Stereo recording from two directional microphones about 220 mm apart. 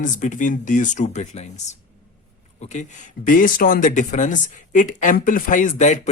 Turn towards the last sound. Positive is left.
turn(degrees=35)  # may be behind; listen again after turning